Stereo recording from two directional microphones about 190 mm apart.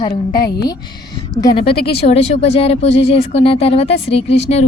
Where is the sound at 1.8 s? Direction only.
30° left (ahead or behind).